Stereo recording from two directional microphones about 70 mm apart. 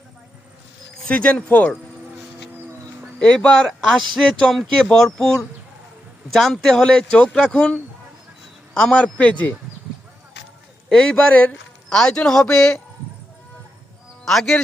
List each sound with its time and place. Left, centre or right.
1.0 s speech: centre
3.2 s speech: centre
10.8 s a man's voice: centre
14.3 s speech: centre